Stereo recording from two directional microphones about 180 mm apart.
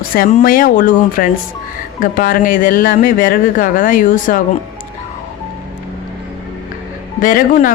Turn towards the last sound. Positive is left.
turn(degrees=50)  # may be behind; listen again after turning